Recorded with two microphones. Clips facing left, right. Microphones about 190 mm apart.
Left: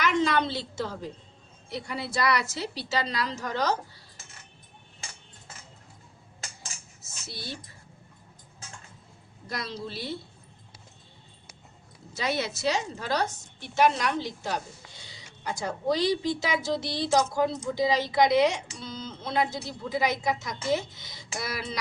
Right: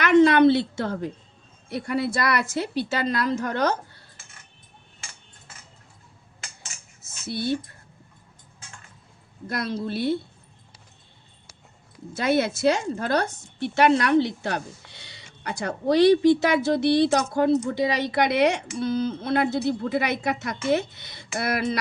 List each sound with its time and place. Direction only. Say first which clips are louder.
0.0 s a woman's voice: right 10 dB; 60° right (ahead or behind)
7.3 s speech: right 14 dB; 60° right (ahead or behind)
9.5 s speech: right 7 dB; 55° right (ahead or behind)
12.1 s speech: right 7 dB; 55° right (ahead or behind)